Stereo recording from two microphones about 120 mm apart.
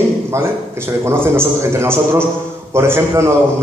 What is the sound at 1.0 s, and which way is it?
A man's voice, 20° right (ahead or behind).